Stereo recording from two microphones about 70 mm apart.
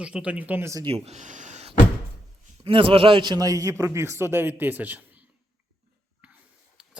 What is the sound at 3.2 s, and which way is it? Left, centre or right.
Speech, right.